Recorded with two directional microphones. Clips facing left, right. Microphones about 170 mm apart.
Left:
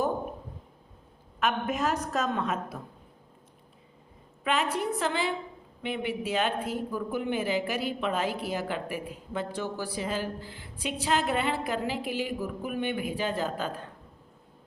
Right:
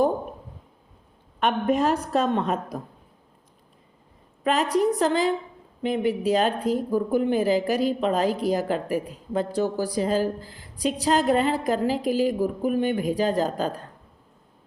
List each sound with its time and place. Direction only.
1.4 s speech: 35° right (ahead or behind)
4.4 s speech: 40° right (ahead or behind)